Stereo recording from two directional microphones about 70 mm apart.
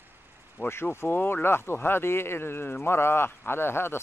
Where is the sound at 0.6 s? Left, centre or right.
Left.